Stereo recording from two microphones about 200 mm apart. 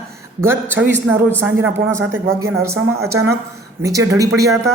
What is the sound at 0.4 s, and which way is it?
A woman's voice, 10° right (ahead or behind).